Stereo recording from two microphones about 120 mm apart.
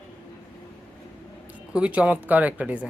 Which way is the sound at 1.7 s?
10° right (ahead or behind).